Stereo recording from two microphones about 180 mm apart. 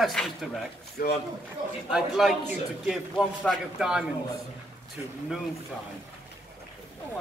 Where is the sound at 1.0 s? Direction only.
55° left (ahead or behind).